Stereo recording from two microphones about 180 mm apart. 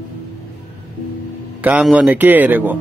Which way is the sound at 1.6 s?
5° right (ahead or behind).